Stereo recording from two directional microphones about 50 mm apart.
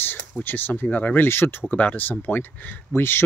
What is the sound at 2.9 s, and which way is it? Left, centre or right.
Speech, left.